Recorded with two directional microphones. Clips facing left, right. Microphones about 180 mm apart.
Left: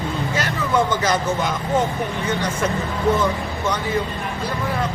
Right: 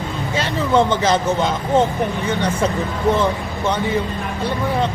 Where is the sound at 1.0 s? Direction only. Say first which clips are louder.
Right 3 dB; 25° right (ahead or behind).